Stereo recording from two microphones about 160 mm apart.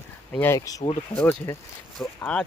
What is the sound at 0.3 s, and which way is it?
Speech, 15° left (ahead or behind).